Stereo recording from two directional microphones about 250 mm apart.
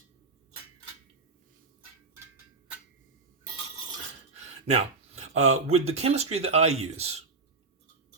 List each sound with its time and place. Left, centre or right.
4.6 s speech: right